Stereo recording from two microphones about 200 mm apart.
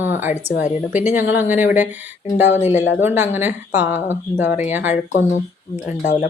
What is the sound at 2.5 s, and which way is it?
Speech, 35° left (ahead or behind).